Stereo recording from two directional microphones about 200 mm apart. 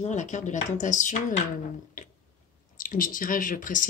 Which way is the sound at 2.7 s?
45° left (ahead or behind).